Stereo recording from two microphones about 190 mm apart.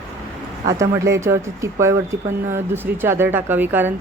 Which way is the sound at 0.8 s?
15° right (ahead or behind).